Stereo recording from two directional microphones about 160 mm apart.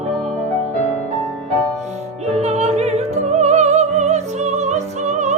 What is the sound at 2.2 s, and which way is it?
Music, 40° right (ahead or behind).